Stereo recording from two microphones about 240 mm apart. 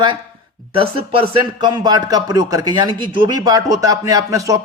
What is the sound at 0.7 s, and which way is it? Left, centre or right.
Speech, right.